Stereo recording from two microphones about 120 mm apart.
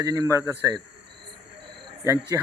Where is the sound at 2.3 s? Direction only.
25° right (ahead or behind).